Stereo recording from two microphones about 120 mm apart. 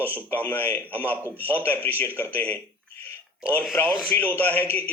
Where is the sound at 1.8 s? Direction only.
15° left (ahead or behind).